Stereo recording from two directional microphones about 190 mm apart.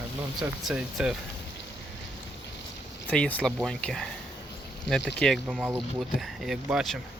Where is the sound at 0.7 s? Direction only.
Centre (ahead or behind).